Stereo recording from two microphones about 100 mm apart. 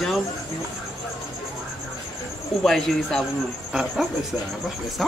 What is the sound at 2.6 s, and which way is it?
Speech, 5° left (ahead or behind).